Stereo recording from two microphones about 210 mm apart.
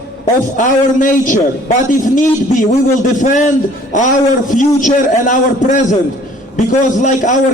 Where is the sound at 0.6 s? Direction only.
40° left (ahead or behind).